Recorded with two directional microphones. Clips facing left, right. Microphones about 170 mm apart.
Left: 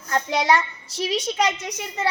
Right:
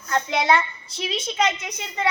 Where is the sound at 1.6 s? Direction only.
35° left (ahead or behind).